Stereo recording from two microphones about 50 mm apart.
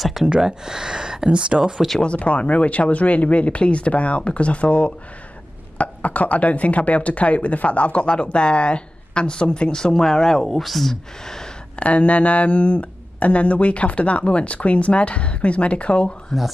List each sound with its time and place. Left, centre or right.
0.0 s speech: centre; by 1.6 s right
1.6 s speech: centre
2.0 s speech: left; by 11.4 s centre
11.7 s speech: left
16.3 s speech: centre